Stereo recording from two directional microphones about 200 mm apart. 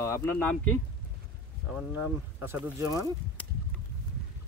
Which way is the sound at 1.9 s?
10° right (ahead or behind).